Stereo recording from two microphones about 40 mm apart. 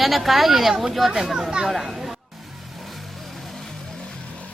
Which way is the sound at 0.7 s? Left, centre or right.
Centre.